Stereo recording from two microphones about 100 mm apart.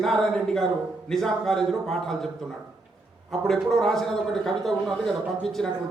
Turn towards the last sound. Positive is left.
turn(degrees=5)  # may be behind; listen again after turning